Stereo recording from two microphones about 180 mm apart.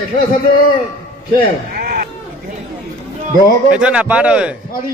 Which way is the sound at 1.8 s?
55° right (ahead or behind).